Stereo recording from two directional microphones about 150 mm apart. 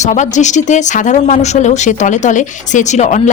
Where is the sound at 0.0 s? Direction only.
55° left (ahead or behind).